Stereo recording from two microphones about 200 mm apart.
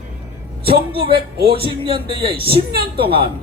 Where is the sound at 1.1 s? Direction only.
50° right (ahead or behind).